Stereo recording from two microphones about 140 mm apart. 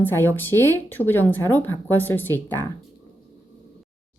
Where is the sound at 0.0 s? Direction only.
15° left (ahead or behind).